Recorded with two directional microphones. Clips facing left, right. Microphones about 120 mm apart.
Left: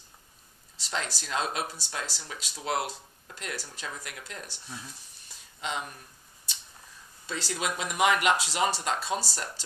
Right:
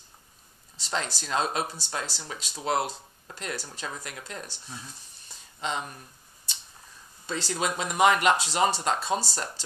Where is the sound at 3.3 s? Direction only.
35° right (ahead or behind).